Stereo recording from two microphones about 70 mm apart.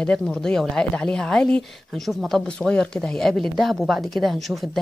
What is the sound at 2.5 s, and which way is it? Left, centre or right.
Speech, centre.